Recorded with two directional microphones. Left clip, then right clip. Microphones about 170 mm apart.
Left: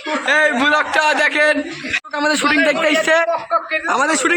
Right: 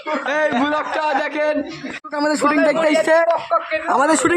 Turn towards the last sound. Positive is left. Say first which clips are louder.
# even
turn(degrees=-20)  # may be behind; listen again after turning